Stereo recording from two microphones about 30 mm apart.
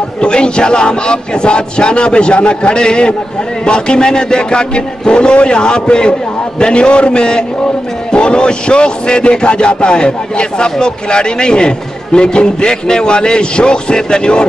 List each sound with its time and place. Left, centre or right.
0.2 s a man's voice: left